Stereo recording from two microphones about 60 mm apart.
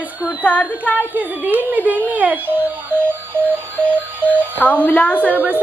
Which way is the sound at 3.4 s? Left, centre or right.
Right.